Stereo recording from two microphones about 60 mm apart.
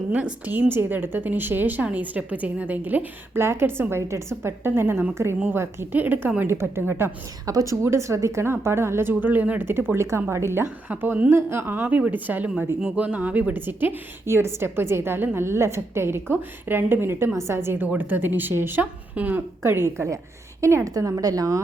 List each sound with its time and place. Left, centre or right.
0.1 s a woman's voice: right
3.3 s a woman's voice: right
5.1 s speech: right
5.9 s a woman's voice: right
6.5 s speech: right
7.4 s speech: right
10.8 s a woman's voice: right
11.3 s a woman's voice: right
14.3 s a woman's voice: right
19.1 s speech: right
19.6 s a woman's voice: right
20.8 s a woman's voice: right